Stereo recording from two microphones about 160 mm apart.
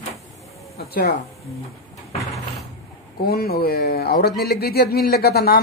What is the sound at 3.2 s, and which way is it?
A man's voice, 75° left (ahead or behind).